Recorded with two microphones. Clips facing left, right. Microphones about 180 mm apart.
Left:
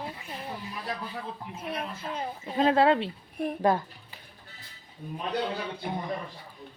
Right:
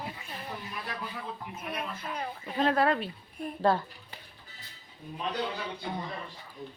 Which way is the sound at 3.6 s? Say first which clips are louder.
Left 1 dB; 15° left (ahead or behind).